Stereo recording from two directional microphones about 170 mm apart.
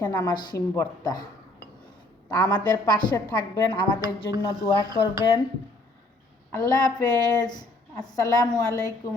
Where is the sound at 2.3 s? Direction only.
25° left (ahead or behind).